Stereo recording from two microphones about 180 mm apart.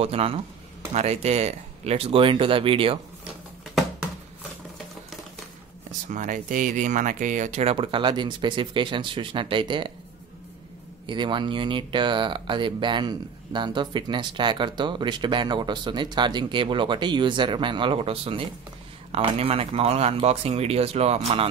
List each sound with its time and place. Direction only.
0.0 s speech: 35° right (ahead or behind)
6.0 s speech: 45° right (ahead or behind); by 9.9 s 25° right (ahead or behind)
11.1 s speech: 25° right (ahead or behind)